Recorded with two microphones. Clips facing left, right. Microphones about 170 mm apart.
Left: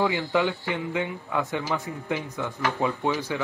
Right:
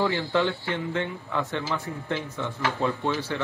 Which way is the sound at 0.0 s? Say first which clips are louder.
Even; 20° left (ahead or behind).